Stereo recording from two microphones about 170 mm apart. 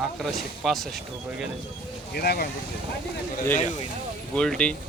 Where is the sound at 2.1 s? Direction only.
65° left (ahead or behind).